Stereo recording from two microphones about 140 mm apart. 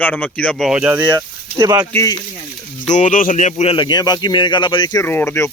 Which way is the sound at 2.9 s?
60° left (ahead or behind).